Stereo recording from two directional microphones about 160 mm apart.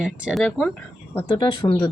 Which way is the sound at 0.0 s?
Centre (ahead or behind).